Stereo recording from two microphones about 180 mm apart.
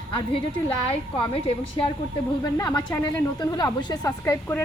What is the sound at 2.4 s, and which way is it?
Speech, 20° left (ahead or behind).